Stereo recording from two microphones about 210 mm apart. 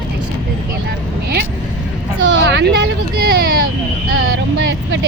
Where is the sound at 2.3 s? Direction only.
55° right (ahead or behind).